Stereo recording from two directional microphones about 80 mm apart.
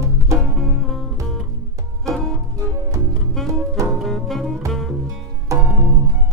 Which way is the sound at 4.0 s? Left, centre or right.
Centre.